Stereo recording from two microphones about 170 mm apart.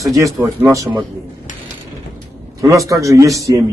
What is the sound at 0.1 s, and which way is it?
Speech, 20° right (ahead or behind).